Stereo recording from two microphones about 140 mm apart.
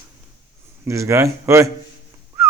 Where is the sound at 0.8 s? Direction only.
20° right (ahead or behind).